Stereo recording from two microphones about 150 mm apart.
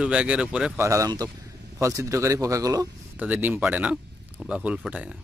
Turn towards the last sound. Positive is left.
turn(degrees=-10)  # may be behind; listen again after turning